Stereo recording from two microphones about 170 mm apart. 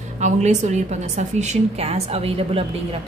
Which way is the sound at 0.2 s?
45° right (ahead or behind).